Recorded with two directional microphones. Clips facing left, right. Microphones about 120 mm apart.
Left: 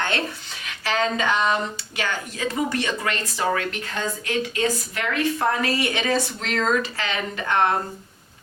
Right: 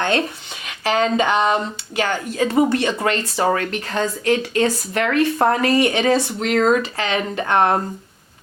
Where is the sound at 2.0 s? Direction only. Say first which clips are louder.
Right 6 dB; 55° right (ahead or behind).